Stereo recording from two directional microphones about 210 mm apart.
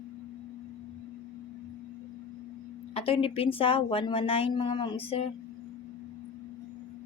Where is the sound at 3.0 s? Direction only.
25° left (ahead or behind).